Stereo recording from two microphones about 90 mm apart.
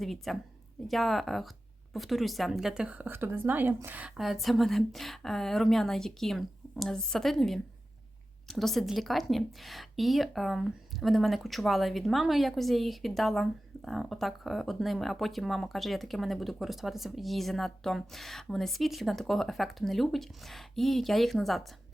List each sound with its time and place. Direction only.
0.0 s a woman's voice: centre (ahead or behind); by 4.1 s 15° right (ahead or behind)
4.2 s a woman's voice: centre (ahead or behind)